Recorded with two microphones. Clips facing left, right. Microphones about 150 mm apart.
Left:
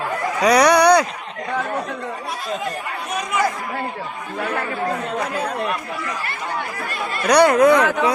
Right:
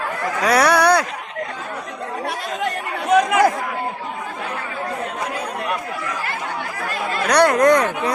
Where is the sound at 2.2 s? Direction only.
70° right (ahead or behind).